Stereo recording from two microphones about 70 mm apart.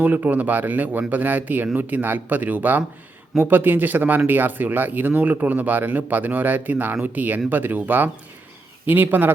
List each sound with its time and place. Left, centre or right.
0.0 s speech: right